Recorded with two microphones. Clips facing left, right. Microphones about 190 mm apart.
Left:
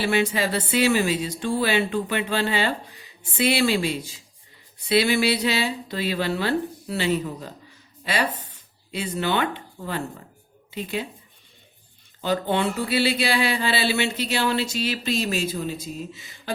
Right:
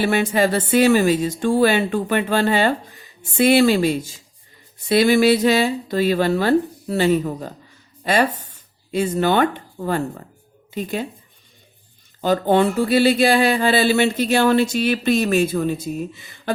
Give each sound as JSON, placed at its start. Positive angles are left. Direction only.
{"t": 0.0, "sound": "speech", "side_deg": -50}
{"t": 12.2, "sound": "speech", "side_deg": -45}